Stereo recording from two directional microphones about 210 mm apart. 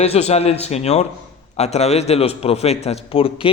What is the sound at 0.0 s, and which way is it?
A man's voice, 30° left (ahead or behind).